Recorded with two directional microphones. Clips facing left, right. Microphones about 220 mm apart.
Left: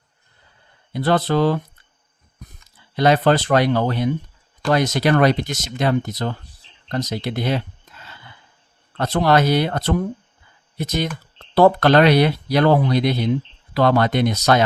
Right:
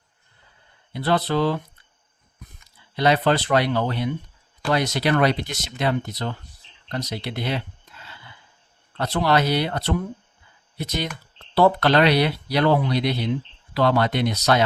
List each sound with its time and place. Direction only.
0.9 s speech: 45° left (ahead or behind)
2.9 s speech: 45° left (ahead or behind)
9.0 s speech: 45° left (ahead or behind)